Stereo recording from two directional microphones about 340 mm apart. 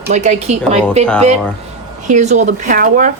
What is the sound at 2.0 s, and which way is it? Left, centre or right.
Speech, right.